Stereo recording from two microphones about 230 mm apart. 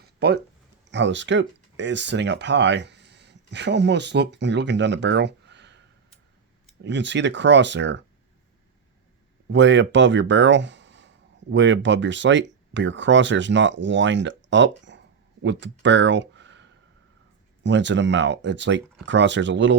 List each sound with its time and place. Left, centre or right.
0.2 s speech: right
6.8 s speech: right
9.5 s speech: right
14.9 s a sound: right
15.4 s speech: right